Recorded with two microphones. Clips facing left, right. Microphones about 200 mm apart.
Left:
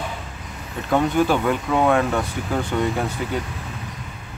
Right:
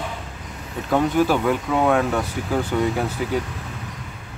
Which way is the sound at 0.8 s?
5° right (ahead or behind).